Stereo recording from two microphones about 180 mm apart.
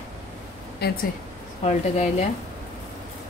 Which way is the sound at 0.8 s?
60° left (ahead or behind).